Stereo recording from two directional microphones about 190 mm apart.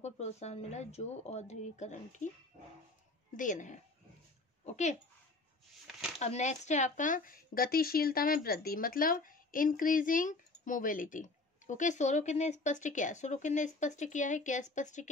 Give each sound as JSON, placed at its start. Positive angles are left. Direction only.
{"t": 0.0, "sound": "speech", "side_deg": 35}
{"t": 3.3, "sound": "speech", "side_deg": 40}
{"t": 6.1, "sound": "speech", "side_deg": 35}